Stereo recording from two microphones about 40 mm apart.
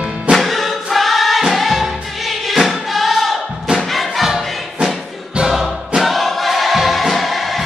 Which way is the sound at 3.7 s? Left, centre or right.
Centre.